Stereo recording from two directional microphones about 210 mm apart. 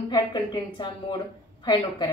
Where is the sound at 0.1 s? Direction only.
20° left (ahead or behind).